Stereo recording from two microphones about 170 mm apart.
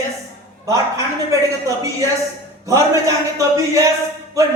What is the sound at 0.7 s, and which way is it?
Speech, 20° right (ahead or behind).